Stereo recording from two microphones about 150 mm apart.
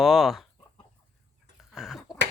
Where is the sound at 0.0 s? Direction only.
Centre (ahead or behind).